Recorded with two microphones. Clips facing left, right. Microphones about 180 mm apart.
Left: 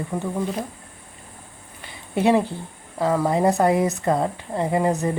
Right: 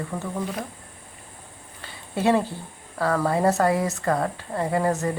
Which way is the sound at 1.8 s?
15° left (ahead or behind).